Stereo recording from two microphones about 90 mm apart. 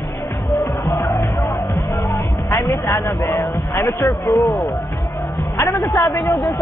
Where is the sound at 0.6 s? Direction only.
50° left (ahead or behind).